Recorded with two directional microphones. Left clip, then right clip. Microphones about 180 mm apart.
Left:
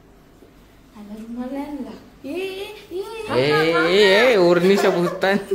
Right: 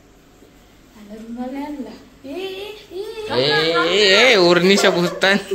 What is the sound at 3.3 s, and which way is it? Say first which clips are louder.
Speech: right 1 dB; 20° left (ahead or behind).